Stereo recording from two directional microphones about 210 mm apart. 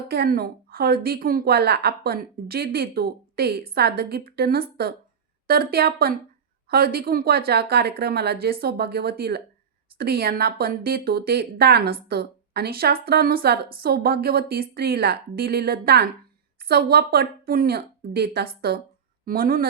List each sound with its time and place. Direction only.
0.1 s a woman's voice: 50° right (ahead or behind)